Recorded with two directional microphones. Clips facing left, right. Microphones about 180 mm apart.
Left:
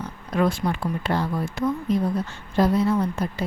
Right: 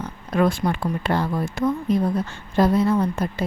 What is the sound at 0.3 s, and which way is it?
A woman's voice, 55° right (ahead or behind).